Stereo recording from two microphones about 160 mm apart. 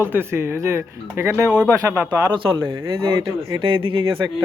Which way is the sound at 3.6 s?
35° right (ahead or behind).